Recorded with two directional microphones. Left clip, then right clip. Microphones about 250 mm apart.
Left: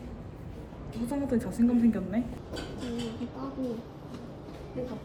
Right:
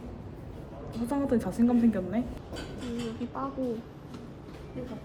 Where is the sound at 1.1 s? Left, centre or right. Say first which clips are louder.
Right 3 dB; centre.